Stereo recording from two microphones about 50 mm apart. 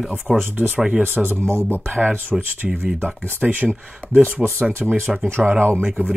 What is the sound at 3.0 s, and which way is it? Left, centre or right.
Speech, right.